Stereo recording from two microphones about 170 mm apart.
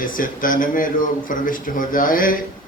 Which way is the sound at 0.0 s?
55° left (ahead or behind).